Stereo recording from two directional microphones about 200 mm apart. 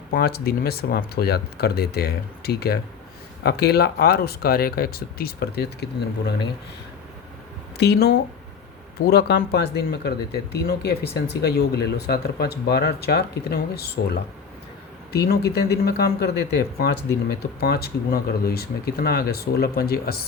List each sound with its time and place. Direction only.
0.1 s speech: 50° left (ahead or behind)
7.8 s speech: 55° left (ahead or behind)